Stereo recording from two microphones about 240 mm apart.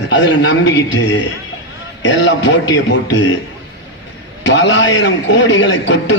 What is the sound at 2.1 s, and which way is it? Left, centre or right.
Speech, left.